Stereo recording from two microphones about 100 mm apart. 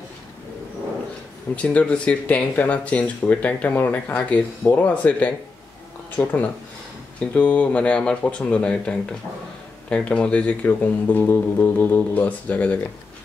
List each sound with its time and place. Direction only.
1.5 s speech: 15° left (ahead or behind)